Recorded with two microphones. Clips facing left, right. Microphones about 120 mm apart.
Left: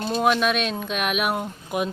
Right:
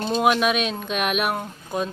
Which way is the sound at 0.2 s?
5° right (ahead or behind).